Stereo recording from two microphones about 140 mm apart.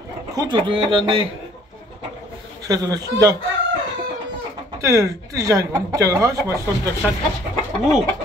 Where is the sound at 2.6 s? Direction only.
25° right (ahead or behind).